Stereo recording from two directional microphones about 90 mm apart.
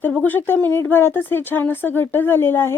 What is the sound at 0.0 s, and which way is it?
Speech, 20° left (ahead or behind).